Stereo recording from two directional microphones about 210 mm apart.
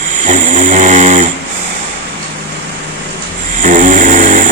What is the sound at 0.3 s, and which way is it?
Snoring, 35° right (ahead or behind).